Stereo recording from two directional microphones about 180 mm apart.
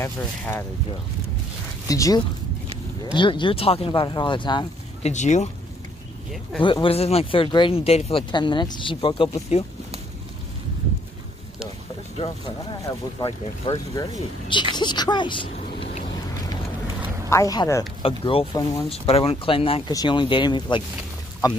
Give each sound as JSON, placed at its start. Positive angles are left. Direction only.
{"t": 0.0, "sound": "speech", "side_deg": 15}
{"t": 1.9, "sound": "speech", "side_deg": 20}
{"t": 5.0, "sound": "speech", "side_deg": 40}
{"t": 6.6, "sound": "speech", "side_deg": 30}
{"t": 12.9, "sound": "speech", "side_deg": 15}
{"t": 17.3, "sound": "speech", "side_deg": 20}
{"t": 18.0, "sound": "speech", "side_deg": 30}